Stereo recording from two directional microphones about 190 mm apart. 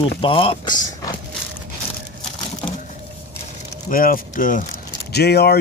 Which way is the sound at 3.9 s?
45° left (ahead or behind).